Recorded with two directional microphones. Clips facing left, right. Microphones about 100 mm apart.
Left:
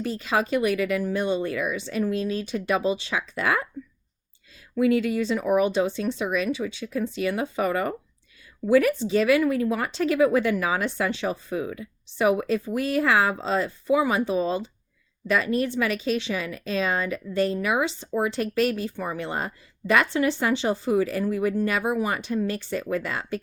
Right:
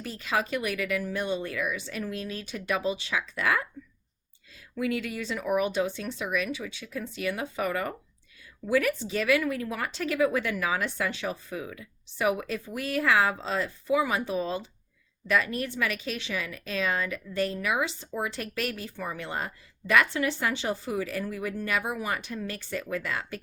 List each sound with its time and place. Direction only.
0.0 s speech: 30° left (ahead or behind)
4.8 s speech: 30° left (ahead or behind)